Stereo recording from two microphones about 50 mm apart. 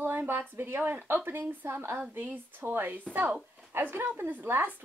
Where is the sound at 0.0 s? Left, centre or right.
Right.